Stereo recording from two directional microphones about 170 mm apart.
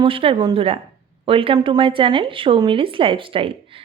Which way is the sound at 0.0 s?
30° right (ahead or behind).